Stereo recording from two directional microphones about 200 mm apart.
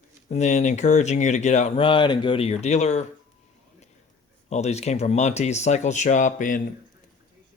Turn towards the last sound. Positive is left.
turn(degrees=40)  # may be behind; listen again after turning